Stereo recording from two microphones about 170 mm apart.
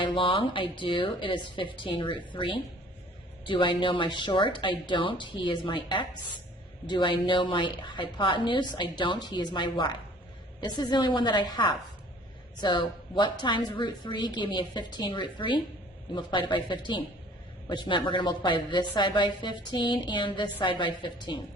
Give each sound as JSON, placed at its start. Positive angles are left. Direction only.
{"t": 0.0, "sound": "a woman's voice", "side_deg": 30}